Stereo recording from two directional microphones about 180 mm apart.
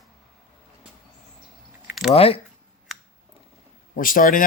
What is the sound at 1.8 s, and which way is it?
Chewing, centre (ahead or behind).